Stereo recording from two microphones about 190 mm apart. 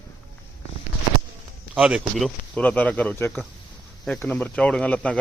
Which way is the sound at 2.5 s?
5° left (ahead or behind).